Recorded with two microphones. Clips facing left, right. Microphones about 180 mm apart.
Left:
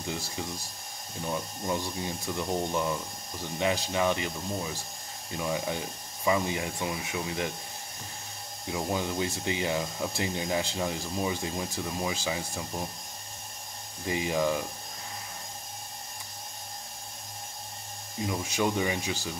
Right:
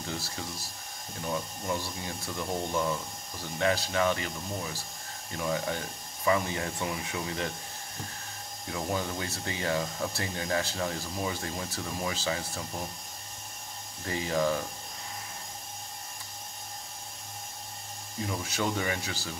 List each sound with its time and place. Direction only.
0.0 s speech: 15° left (ahead or behind)
8.6 s speech: 15° left (ahead or behind)
14.0 s speech: 15° left (ahead or behind)
18.2 s speech: 15° left (ahead or behind)